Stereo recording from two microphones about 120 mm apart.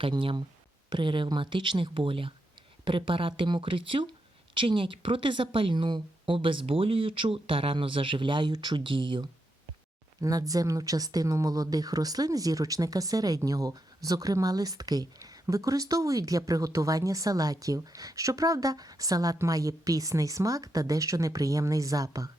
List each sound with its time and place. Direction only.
0.0 s speech: 45° right (ahead or behind)
10.2 s a woman's voice: 30° right (ahead or behind)